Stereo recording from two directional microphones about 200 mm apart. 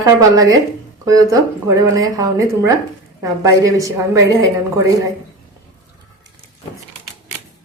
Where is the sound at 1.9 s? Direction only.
20° right (ahead or behind).